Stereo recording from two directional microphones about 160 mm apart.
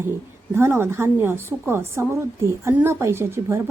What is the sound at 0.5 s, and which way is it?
Speech, 15° right (ahead or behind).